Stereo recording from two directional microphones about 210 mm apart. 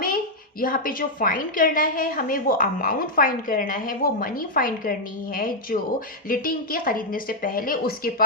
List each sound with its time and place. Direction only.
0.6 s a woman's voice: 40° left (ahead or behind)